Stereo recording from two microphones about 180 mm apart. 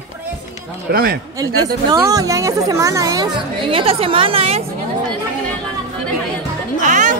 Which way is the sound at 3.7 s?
30° right (ahead or behind).